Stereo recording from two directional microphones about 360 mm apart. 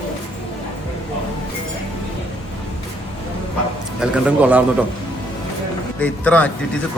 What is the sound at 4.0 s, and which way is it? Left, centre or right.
Speech, centre.